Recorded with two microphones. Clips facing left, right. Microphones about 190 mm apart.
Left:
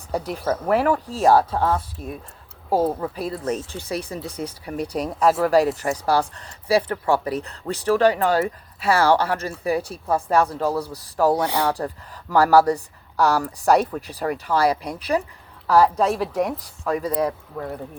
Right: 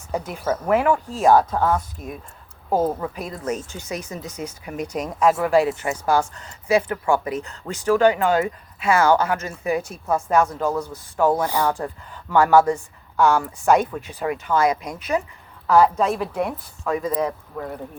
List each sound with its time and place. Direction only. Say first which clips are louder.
0.1 s speech: even; 35° left (ahead or behind)